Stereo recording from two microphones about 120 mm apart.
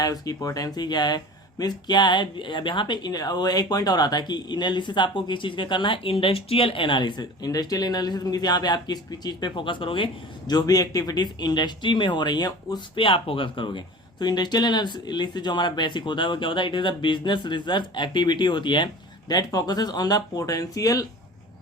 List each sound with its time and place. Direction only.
0.0 s speech: 30° left (ahead or behind)